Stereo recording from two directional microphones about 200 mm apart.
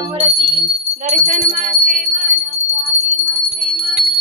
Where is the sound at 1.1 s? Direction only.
35° right (ahead or behind).